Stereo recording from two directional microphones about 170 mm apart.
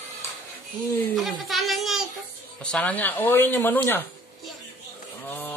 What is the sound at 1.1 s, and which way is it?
A child's voice, centre (ahead or behind).